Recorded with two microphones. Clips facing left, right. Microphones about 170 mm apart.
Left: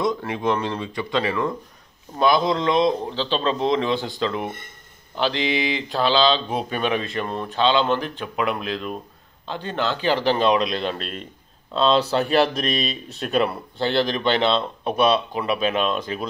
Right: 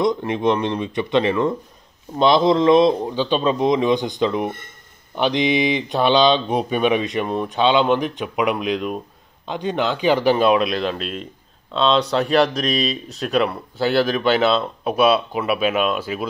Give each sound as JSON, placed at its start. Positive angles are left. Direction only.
{"t": 0.0, "sound": "a man's voice", "side_deg": -20}